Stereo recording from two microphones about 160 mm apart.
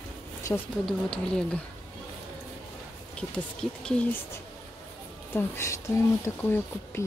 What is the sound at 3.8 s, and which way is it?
Speech, 5° left (ahead or behind).